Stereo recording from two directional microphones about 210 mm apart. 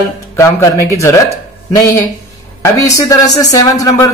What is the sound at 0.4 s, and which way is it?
Speech, 15° left (ahead or behind).